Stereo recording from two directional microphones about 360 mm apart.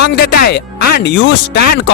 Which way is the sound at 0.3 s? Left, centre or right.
Left.